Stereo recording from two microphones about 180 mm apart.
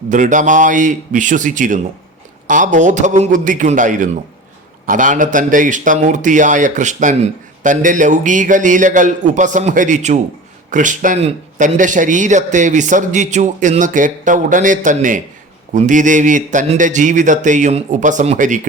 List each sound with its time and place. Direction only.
0.1 s a man's voice: 45° right (ahead or behind)